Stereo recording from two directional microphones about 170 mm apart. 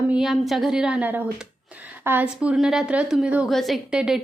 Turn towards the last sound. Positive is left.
turn(degrees=-5)  # may be behind; listen again after turning